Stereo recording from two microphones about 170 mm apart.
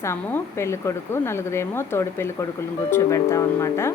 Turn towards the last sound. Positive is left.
turn(degrees=15)  # may be behind; listen again after turning